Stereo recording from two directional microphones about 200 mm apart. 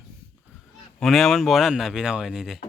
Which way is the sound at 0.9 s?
Centre (ahead or behind).